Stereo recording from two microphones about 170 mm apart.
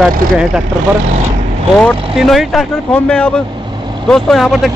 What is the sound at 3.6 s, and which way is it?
Vehicle, 25° right (ahead or behind).